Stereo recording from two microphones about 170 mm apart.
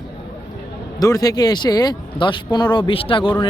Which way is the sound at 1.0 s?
20° left (ahead or behind).